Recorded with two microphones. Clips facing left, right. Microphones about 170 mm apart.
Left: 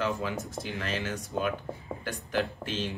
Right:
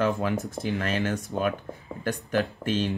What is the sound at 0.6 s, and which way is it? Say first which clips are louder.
A man's voice: right 7 dB; 50° right (ahead or behind).